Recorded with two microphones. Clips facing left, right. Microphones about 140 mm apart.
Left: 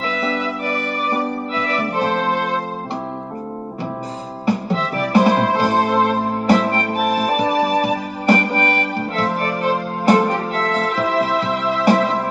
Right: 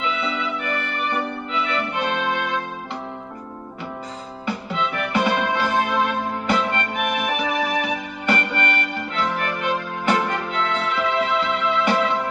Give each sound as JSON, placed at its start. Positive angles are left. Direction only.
{"t": 0.0, "sound": "music", "side_deg": 35}
{"t": 4.5, "sound": "music", "side_deg": 35}